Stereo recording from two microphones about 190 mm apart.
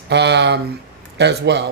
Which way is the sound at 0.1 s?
65° right (ahead or behind).